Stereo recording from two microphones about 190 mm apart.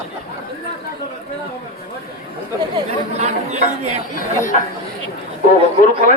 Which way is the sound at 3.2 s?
35° right (ahead or behind).